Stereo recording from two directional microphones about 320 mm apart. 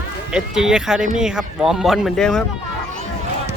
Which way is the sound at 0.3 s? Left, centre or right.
Centre.